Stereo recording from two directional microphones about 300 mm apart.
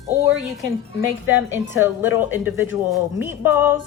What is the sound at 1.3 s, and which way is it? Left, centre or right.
Speech, left.